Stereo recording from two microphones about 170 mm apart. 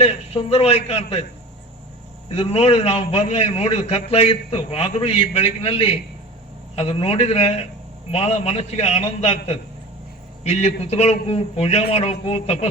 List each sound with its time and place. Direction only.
0.0 s a man's voice: 35° left (ahead or behind)
2.3 s a man's voice: 35° left (ahead or behind)